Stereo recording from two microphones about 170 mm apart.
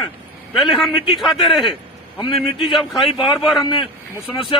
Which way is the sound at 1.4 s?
30° left (ahead or behind).